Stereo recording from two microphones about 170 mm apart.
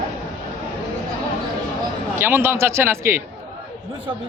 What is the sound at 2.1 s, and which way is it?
A man's voice, 15° right (ahead or behind).